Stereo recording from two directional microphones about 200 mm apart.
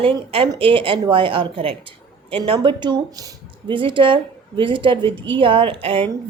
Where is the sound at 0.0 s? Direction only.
25° right (ahead or behind).